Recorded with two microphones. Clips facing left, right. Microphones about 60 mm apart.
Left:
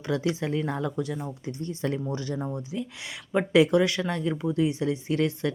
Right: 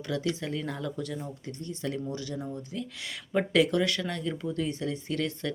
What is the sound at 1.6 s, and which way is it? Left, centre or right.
Speech, left.